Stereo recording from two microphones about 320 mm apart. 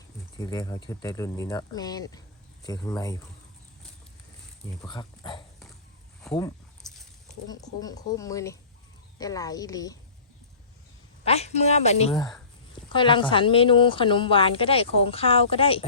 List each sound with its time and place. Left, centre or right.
0.3 s a woman's voice: centre
4.8 s speech: centre
6.3 s speech: centre
6.8 s a sound: centre
7.4 s a woman's voice: centre
11.3 s a woman's voice: centre